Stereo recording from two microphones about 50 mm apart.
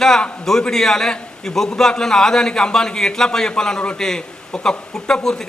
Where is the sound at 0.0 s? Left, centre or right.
Centre.